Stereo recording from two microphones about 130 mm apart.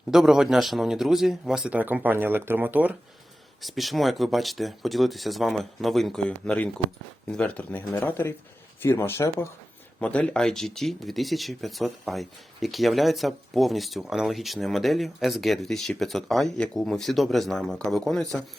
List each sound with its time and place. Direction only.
0.1 s speech: 5° right (ahead or behind)
3.6 s speech: centre (ahead or behind); by 9.5 s 20° left (ahead or behind)
10.0 s speech: 10° left (ahead or behind)